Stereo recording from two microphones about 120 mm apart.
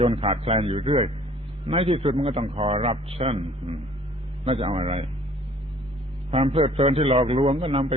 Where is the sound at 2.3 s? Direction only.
50° right (ahead or behind).